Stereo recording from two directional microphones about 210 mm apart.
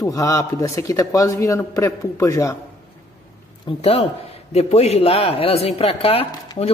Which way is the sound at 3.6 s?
25° left (ahead or behind).